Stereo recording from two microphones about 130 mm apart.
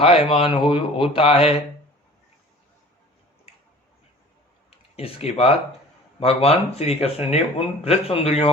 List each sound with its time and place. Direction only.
0.0 s speech: 45° left (ahead or behind)
4.9 s speech: 45° left (ahead or behind)